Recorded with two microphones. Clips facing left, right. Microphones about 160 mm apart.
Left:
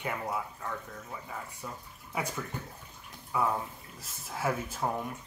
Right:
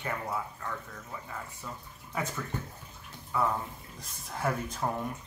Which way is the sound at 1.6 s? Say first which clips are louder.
Even; 15° left (ahead or behind).